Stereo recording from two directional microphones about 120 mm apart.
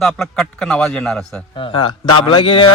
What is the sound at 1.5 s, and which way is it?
A man's voice, 45° left (ahead or behind).